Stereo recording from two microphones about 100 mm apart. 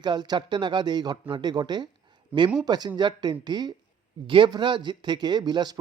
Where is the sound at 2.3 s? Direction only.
15° right (ahead or behind).